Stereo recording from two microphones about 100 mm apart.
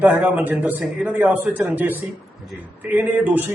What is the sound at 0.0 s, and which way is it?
A man's voice, 15° right (ahead or behind).